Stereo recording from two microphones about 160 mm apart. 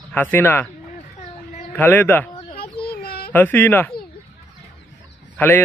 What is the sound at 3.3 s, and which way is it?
Speech, 10° left (ahead or behind).